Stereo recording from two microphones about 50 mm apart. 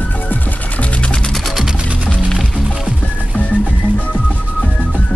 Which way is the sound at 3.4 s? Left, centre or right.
Left.